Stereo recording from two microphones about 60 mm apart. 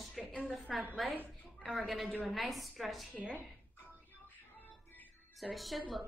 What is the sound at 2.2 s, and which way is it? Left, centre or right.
Speech, centre.